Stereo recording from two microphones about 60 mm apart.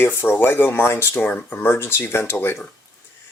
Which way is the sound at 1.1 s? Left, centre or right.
Left.